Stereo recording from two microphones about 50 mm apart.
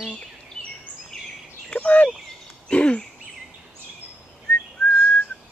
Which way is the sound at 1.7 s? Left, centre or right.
Left.